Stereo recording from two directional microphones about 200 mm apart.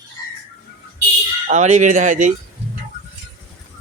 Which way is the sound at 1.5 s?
35° right (ahead or behind).